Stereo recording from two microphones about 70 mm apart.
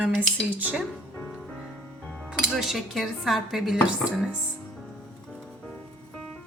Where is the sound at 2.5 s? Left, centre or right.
Centre.